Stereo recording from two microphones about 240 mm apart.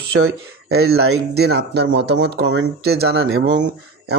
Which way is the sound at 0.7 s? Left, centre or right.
Right.